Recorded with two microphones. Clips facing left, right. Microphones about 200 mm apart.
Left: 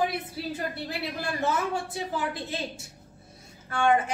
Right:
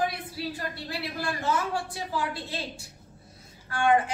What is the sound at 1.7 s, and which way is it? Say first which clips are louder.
A woman's voice: left 1 dB; 20° left (ahead or behind).